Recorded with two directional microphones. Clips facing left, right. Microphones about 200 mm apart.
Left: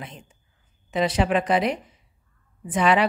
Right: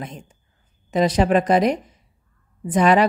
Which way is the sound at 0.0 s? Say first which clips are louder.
Right 6 dB; 45° right (ahead or behind).